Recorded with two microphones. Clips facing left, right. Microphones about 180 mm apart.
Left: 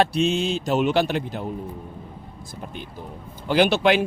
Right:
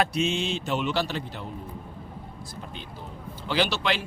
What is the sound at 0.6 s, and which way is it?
Speech, 45° left (ahead or behind).